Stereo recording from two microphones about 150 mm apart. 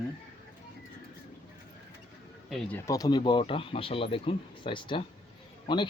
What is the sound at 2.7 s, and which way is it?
Speech, 20° left (ahead or behind).